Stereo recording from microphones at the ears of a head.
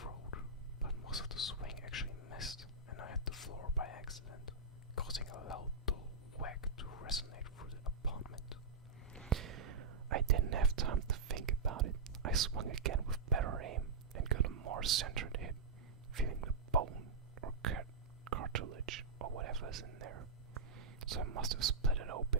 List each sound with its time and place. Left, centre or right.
0.0 s whispering: left
9.3 s whispering: right